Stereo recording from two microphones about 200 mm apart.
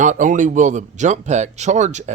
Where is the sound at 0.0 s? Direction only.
40° right (ahead or behind).